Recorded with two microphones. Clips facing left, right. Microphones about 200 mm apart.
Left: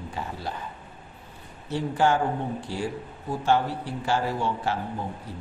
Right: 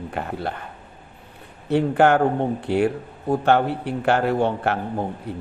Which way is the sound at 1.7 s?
60° right (ahead or behind).